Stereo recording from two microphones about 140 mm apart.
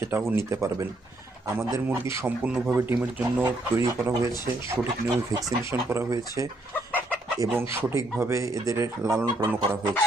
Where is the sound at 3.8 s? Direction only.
20° right (ahead or behind).